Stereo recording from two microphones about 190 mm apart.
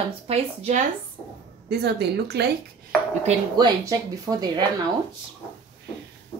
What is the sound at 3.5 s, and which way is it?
Speech, 20° right (ahead or behind).